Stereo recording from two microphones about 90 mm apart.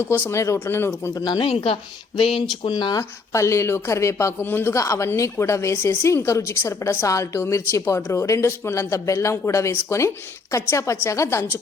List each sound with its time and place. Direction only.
0.0 s speech: 30° left (ahead or behind)
1.1 s speech: 50° left (ahead or behind)
1.4 s speech: 90° left
2.6 s speech: 50° left (ahead or behind)
3.0 s speech: 35° left (ahead or behind)